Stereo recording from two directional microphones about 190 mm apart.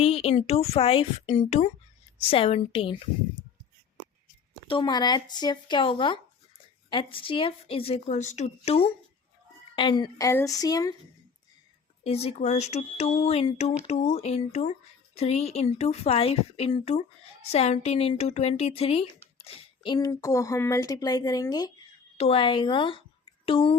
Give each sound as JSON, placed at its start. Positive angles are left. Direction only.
{"t": 0.0, "sound": "speech", "side_deg": 30}
{"t": 4.7, "sound": "speech", "side_deg": 25}
{"t": 12.0, "sound": "speech", "side_deg": 35}